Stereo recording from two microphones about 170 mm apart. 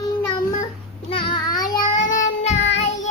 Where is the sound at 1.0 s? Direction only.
30° left (ahead or behind).